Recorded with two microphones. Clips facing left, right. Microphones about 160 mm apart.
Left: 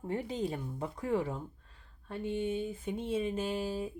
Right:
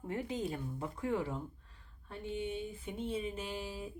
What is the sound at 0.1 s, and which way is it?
Speech, 30° left (ahead or behind).